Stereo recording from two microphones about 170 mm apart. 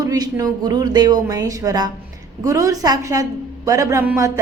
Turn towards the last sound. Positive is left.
turn(degrees=-20)  # may be behind; listen again after turning